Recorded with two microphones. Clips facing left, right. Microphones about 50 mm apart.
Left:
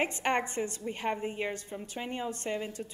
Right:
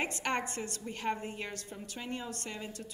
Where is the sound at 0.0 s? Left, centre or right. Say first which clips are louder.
Left 4 dB; left.